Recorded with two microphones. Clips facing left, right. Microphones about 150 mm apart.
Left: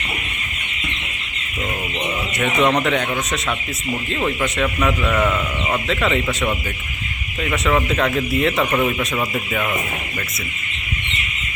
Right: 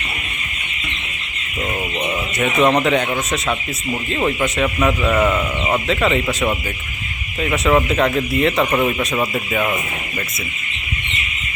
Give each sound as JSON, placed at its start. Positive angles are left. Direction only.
{"t": 2.4, "sound": "speech", "side_deg": 0}
{"t": 4.1, "sound": "speech", "side_deg": -5}
{"t": 5.2, "sound": "speech", "side_deg": -15}
{"t": 5.9, "sound": "speech", "side_deg": 0}